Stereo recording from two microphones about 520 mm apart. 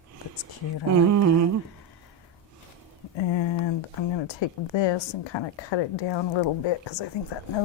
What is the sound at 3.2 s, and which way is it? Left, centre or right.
A woman's voice, left.